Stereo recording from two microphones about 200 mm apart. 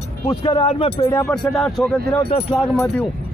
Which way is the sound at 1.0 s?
10° left (ahead or behind).